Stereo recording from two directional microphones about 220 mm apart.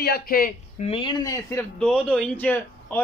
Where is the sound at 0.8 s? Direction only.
25° left (ahead or behind).